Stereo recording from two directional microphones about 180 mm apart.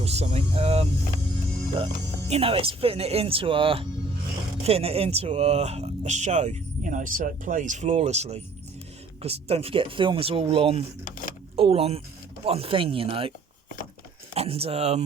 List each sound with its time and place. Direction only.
0.0 s speech: 35° right (ahead or behind)
2.3 s speech: 30° right (ahead or behind)
14.3 s speech: 30° right (ahead or behind)